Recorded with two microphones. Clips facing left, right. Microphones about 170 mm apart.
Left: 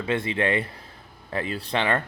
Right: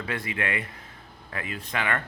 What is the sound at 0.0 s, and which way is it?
Speech, 25° left (ahead or behind).